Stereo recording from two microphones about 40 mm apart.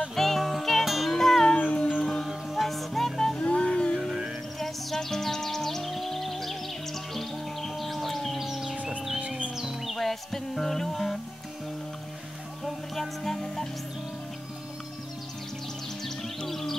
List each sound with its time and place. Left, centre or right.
0.1 s music: centre
1.1 s music: centre
1.5 s music: left
2.5 s music: centre
3.3 s music: left
4.6 s music: centre
8.5 s music: centre
9.9 s music: centre
12.6 s music: centre
16.4 s music: centre